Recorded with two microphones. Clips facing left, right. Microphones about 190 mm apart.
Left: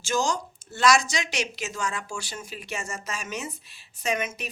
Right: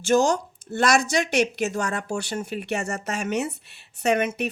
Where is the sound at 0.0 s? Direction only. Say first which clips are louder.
Right 7 dB; 60° right (ahead or behind).